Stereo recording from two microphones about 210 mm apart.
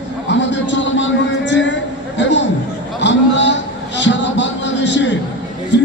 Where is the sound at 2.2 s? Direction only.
60° left (ahead or behind).